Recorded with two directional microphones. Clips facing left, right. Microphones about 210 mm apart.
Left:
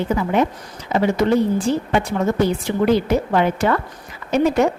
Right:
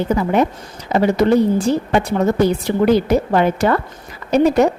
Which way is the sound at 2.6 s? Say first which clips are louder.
Right 3 dB; 40° right (ahead or behind).